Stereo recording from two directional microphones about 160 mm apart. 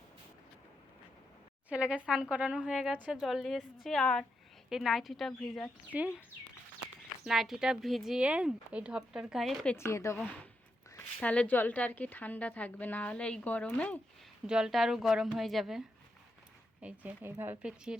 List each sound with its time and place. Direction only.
1.7 s a woman's voice: 5° right (ahead or behind)
5.9 s speech: 10° right (ahead or behind)
7.3 s a woman's voice: centre (ahead or behind)
9.7 s a woman's voice: 15° left (ahead or behind)
14.4 s a woman's voice: 5° right (ahead or behind)
16.8 s speech: 10° right (ahead or behind)